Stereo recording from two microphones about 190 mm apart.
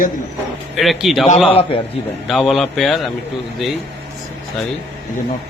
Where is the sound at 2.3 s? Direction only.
Centre (ahead or behind).